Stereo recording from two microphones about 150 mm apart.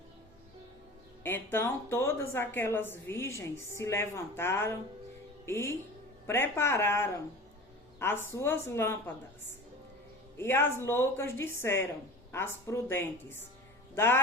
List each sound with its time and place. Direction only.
1.2 s a woman's voice: 15° left (ahead or behind)
10.3 s a woman's voice: 15° left (ahead or behind)